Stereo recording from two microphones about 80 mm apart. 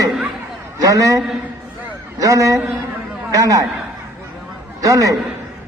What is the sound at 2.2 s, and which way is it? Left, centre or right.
A man's voice, right.